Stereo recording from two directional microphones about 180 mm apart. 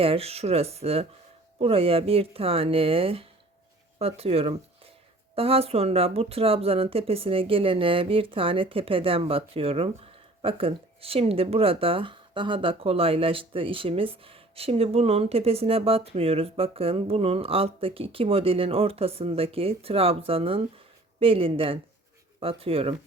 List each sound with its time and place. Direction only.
0.0 s speech: 30° right (ahead or behind)